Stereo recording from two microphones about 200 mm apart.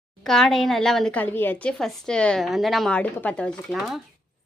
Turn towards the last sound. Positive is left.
turn(degrees=0)  # may be behind; listen again after turning